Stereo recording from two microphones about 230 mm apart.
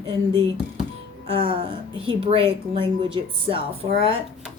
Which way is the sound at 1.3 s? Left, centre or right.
Right.